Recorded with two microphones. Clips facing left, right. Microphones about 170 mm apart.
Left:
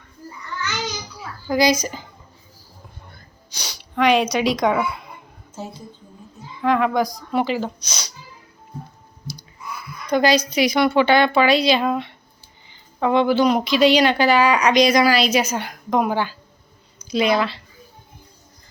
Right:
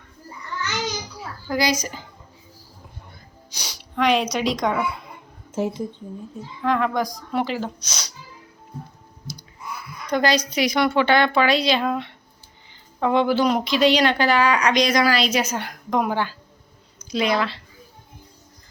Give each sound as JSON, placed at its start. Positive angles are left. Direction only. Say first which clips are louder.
{"t": 1.5, "sound": "a woman's voice", "louder": "left 5 dB", "side_deg": 15}
{"t": 3.5, "sound": "a sound", "louder": "left 2 dB", "side_deg": -5}
{"t": 4.4, "sound": "speech", "louder": "left 3 dB", "side_deg": 5}
{"t": 5.5, "sound": "speech", "louder": "right 9 dB", "side_deg": -90}
{"t": 6.6, "sound": "a woman's voice", "louder": "left 3 dB", "side_deg": 10}
{"t": 10.1, "sound": "a woman's voice", "louder": "left 3 dB", "side_deg": 5}
{"t": 13.0, "sound": "a woman's voice", "louder": "left 2 dB", "side_deg": 0}